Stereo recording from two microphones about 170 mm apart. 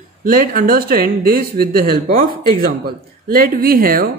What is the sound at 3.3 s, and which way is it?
Speech, 60° right (ahead or behind).